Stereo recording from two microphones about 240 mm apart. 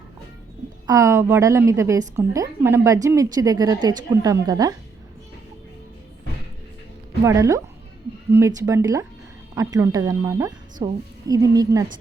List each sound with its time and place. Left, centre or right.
0.9 s a woman's voice: centre
7.3 s a woman's voice: centre